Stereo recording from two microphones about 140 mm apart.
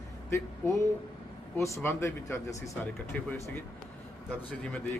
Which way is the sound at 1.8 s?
20° left (ahead or behind).